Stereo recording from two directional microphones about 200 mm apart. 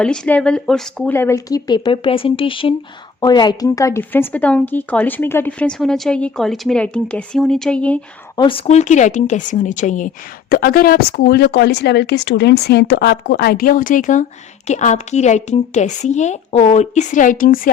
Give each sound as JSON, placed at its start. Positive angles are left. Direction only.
{"t": 0.0, "sound": "speech", "side_deg": 5}
{"t": 8.4, "sound": "speech", "side_deg": 25}
{"t": 10.5, "sound": "speech", "side_deg": 50}